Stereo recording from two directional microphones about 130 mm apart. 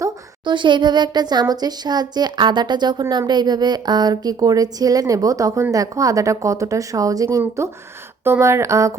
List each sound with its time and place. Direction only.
0.4 s a woman's voice: 35° right (ahead or behind); by 8.9 s 20° right (ahead or behind)